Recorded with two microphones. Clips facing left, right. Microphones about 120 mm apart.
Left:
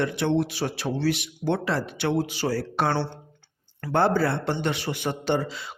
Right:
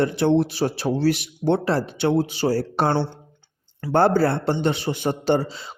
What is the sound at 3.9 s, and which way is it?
Speech, 40° right (ahead or behind).